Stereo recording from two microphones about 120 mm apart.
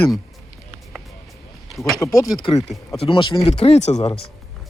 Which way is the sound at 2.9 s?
50° left (ahead or behind).